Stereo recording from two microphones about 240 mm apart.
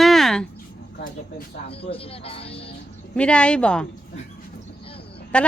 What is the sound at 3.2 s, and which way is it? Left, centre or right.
Speech, centre.